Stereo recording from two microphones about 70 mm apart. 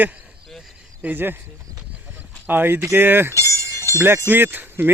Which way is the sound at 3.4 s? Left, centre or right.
Left.